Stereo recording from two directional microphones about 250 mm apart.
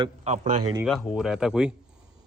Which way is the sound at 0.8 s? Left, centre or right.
Centre.